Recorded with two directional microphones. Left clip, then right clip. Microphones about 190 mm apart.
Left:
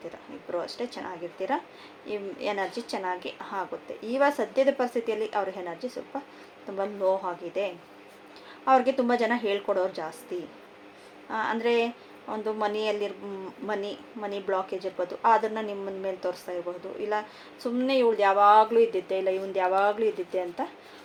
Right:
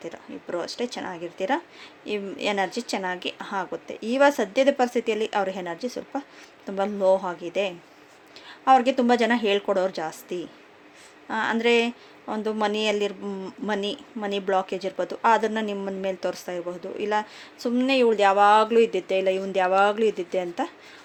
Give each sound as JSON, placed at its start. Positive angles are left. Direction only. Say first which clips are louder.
{"t": 0.5, "sound": "speech", "louder": "right 3 dB", "side_deg": -55}